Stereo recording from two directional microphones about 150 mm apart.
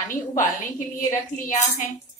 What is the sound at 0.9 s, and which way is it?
Speech, 60° left (ahead or behind).